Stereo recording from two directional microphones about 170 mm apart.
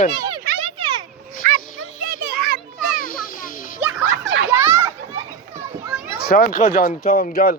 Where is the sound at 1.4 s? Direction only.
50° right (ahead or behind).